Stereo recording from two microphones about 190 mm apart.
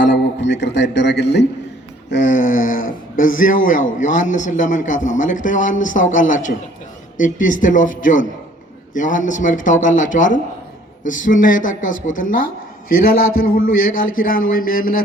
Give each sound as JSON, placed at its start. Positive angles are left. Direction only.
{"t": 0.1, "sound": "music", "side_deg": 70}
{"t": 2.2, "sound": "a woman's voice", "side_deg": 45}